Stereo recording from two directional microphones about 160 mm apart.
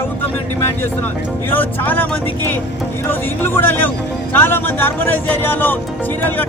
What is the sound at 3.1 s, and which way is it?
Speech, 15° left (ahead or behind).